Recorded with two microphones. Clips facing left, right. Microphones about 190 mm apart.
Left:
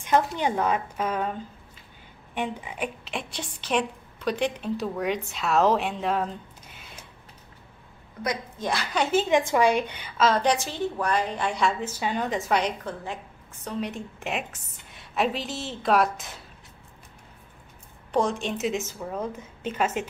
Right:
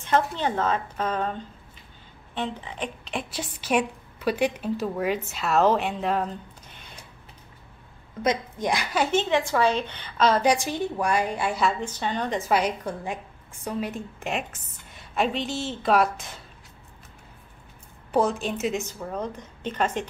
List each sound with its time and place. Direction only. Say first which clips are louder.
0.0 s a woman's voice: left 1 dB; 10° left (ahead or behind)
8.2 s a woman's voice: right 5 dB; 20° right (ahead or behind)
9.1 s a woman's voice: left 3 dB; 5° left (ahead or behind)
10.4 s a woman's voice: right 2 dB; 10° right (ahead or behind)
11.8 s a woman's voice: even; 10° left (ahead or behind)
18.1 s a woman's voice: right 2 dB; 5° right (ahead or behind)